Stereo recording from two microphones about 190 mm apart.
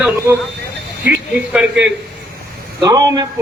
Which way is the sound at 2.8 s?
20° right (ahead or behind).